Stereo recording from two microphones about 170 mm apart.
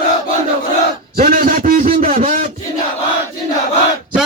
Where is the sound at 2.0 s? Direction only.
35° right (ahead or behind).